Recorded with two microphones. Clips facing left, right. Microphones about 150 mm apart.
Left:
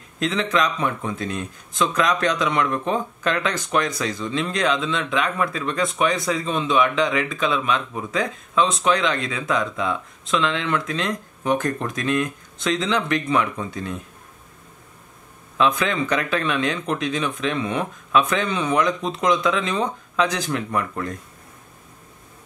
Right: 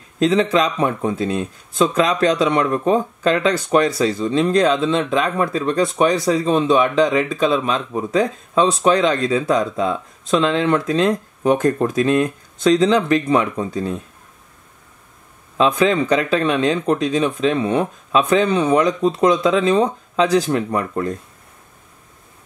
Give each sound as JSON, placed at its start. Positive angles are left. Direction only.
{"t": 0.2, "sound": "speech", "side_deg": -30}
{"t": 15.5, "sound": "speech", "side_deg": -35}